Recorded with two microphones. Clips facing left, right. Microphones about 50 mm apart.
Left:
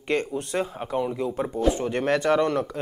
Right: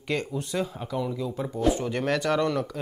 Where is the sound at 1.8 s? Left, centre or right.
Left.